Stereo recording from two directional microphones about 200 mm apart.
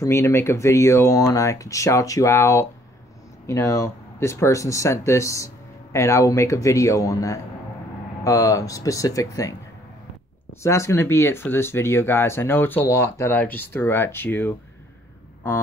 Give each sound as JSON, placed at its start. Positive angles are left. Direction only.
{"t": 0.0, "sound": "speech", "side_deg": 15}
{"t": 10.6, "sound": "speech", "side_deg": 15}